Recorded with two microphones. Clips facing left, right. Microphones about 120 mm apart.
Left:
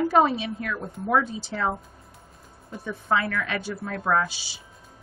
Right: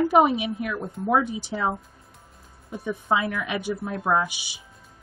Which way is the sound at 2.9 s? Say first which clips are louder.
Right 1 dB; 15° right (ahead or behind).